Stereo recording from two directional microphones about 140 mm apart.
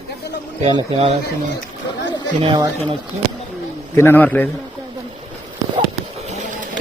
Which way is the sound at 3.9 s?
15° left (ahead or behind).